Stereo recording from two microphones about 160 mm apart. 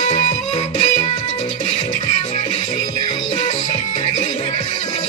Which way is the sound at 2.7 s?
35° left (ahead or behind).